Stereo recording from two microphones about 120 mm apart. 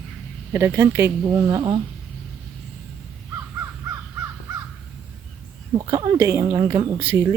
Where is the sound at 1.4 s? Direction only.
35° right (ahead or behind).